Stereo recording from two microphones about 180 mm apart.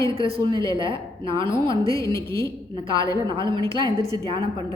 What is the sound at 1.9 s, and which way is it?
Speech, 20° left (ahead or behind).